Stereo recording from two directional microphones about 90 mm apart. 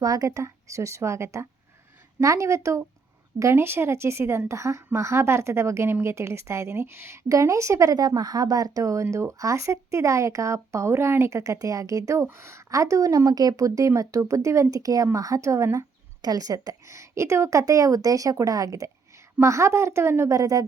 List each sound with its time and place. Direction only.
0.0 s a woman's voice: 40° right (ahead or behind)